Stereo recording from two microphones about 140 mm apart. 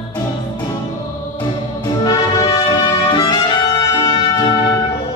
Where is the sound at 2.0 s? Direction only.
25° left (ahead or behind).